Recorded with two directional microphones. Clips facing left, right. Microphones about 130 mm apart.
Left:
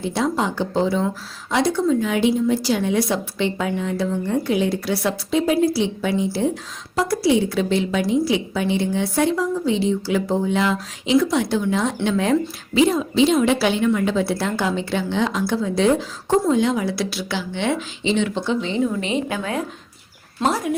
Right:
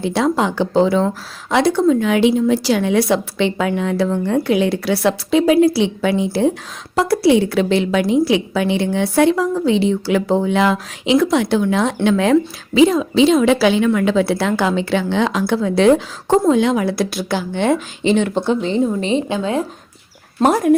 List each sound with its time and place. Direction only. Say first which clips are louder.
0.0 s a woman's voice: right 5 dB; 75° right (ahead or behind); by 18.7 s 50° right (ahead or behind)
18.9 s a woman's voice: right 5 dB; 30° right (ahead or behind)
20.4 s speech: right 8 dB; 55° right (ahead or behind)